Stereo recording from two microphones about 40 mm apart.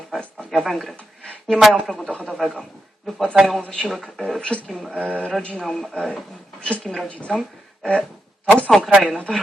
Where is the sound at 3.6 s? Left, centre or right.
Left.